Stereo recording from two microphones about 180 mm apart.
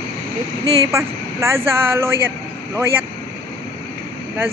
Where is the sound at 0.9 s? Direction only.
15° right (ahead or behind).